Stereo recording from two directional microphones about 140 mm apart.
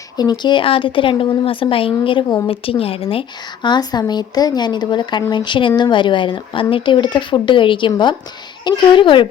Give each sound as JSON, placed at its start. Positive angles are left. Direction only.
{"t": 0.2, "sound": "speech", "side_deg": 30}